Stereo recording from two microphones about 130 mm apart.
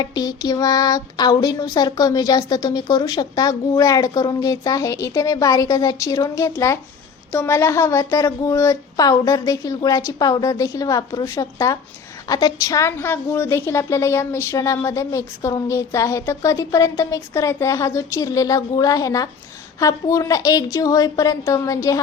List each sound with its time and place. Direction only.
0.0 s a woman's voice: 30° left (ahead or behind)